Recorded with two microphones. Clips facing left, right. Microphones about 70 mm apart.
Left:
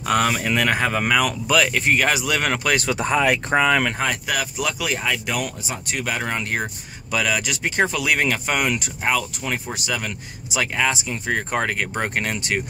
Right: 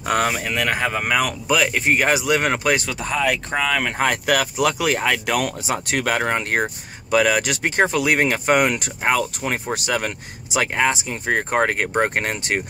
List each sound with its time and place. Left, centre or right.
0.0 s speech: right
0.4 s speech: centre
1.0 s speech: centre
2.9 s speech: left
4.0 s speech: right
6.2 s speech: right
7.8 s speech: right
9.8 s speech: right